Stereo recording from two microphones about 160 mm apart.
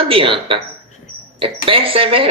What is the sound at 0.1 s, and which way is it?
A man's voice, 35° right (ahead or behind).